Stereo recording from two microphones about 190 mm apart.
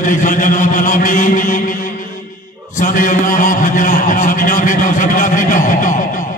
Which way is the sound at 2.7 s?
45° left (ahead or behind).